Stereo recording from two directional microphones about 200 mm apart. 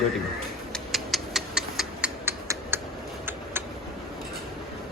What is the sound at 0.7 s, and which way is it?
Tick-tock, centre (ahead or behind).